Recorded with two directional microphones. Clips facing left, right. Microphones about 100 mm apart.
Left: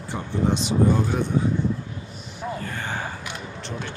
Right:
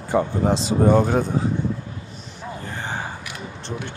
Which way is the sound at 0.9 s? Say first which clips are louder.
Right 10 dB; 60° right (ahead or behind).